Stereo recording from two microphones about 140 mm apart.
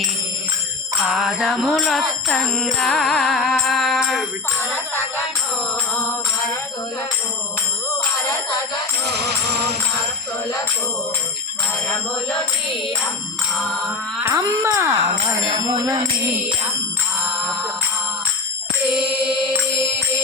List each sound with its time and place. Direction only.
1.1 s music: 5° right (ahead or behind)
4.7 s music: 15° left (ahead or behind)
13.6 s music: 5° left (ahead or behind)
14.2 s speech: 20° right (ahead or behind)